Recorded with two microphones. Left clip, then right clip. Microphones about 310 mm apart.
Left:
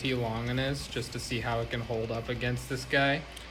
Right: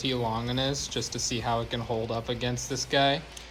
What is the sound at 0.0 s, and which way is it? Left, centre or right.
Speech, centre.